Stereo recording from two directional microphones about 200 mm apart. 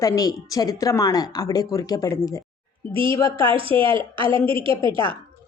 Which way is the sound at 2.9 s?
25° right (ahead or behind).